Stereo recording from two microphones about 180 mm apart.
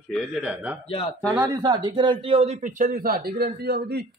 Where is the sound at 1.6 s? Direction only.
25° right (ahead or behind).